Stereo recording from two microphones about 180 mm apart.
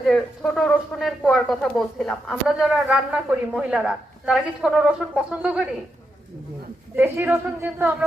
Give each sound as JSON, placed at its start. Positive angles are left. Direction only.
{"t": 0.0, "sound": "speech", "side_deg": 5}
{"t": 6.9, "sound": "a woman's voice", "side_deg": -10}